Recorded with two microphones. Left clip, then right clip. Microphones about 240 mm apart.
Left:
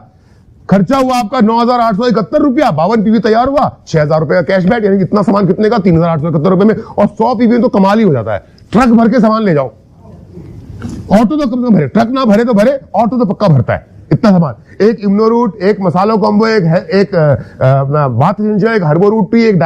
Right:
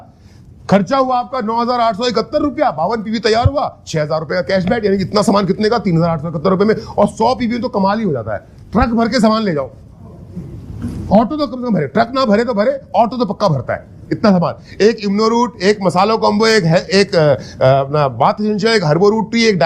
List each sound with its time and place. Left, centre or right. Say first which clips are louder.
0.7 s a man's voice: left 2 dB; left
0.9 s a man's voice: left 4 dB; left
2.6 s speech: left 5 dB; left
3.0 s a man's voice: left 5 dB; left
7.7 s speech: left 6 dB; left
9.0 s a man's voice: left 4 dB; left
11.1 s a man's voice: left 3 dB; left
12.9 s a man's voice: left 2 dB; left
13.5 s speech: left 5 dB; left
14.4 s a man's voice: left 2 dB; left